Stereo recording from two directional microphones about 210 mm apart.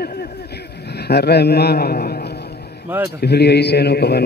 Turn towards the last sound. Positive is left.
turn(degrees=50)  # may be behind; listen again after turning